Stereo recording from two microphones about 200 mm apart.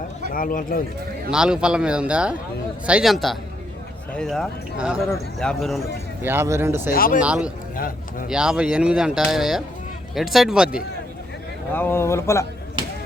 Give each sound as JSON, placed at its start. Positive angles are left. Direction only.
{"t": 0.3, "sound": "speech", "side_deg": 45}
{"t": 1.3, "sound": "speech", "side_deg": -5}
{"t": 6.2, "sound": "speech", "side_deg": -10}
{"t": 6.9, "sound": "speech", "side_deg": 45}
{"t": 7.2, "sound": "speech", "side_deg": -5}
{"t": 7.8, "sound": "speech", "side_deg": 45}
{"t": 8.3, "sound": "speech", "side_deg": -5}
{"t": 11.7, "sound": "speech", "side_deg": 10}